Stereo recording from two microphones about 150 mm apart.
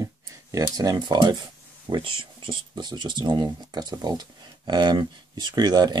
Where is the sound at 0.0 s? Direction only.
20° right (ahead or behind).